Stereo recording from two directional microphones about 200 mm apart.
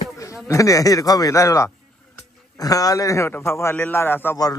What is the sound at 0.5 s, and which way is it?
A man's voice, 15° left (ahead or behind).